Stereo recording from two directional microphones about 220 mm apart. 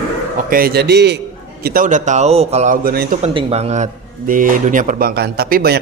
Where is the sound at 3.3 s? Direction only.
30° right (ahead or behind); by 5.8 s 45° right (ahead or behind).